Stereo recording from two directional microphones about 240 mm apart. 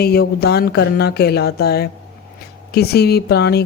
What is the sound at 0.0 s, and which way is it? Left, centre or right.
Speech, left.